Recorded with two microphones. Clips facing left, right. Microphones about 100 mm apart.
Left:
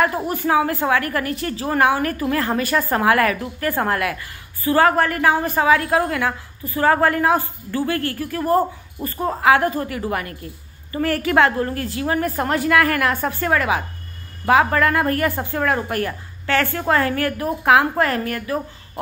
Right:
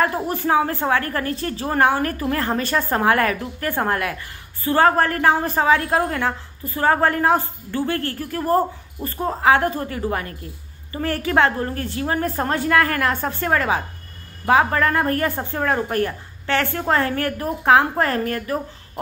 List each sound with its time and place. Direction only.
0.0 s a woman's voice: 30° right (ahead or behind)